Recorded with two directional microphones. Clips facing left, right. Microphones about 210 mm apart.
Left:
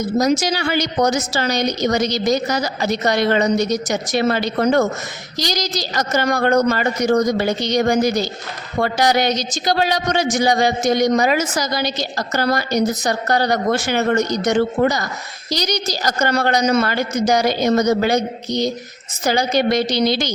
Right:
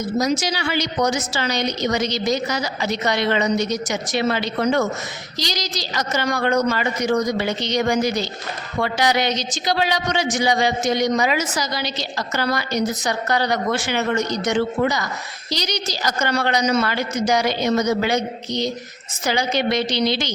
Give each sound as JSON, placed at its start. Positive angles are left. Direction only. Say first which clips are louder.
{"t": 0.0, "sound": "a woman's voice", "louder": "left 4 dB", "side_deg": 45}
{"t": 19.2, "sound": "speech", "louder": "left 4 dB", "side_deg": 40}